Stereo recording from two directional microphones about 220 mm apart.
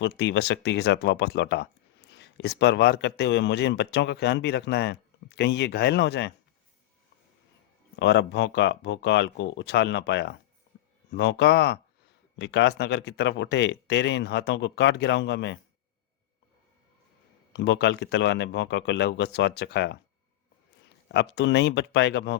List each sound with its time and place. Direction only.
0.0 s speech: 50° left (ahead or behind)
7.9 s speech: 55° left (ahead or behind)
17.5 s speech: 50° left (ahead or behind)
21.1 s speech: 50° left (ahead or behind)